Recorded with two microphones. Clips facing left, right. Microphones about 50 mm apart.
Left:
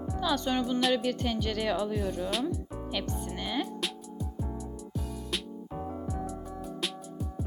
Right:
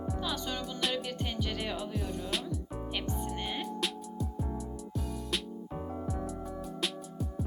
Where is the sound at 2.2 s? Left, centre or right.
Centre.